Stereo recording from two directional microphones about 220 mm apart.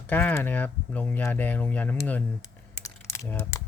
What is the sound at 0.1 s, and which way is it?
Speech, 10° left (ahead or behind).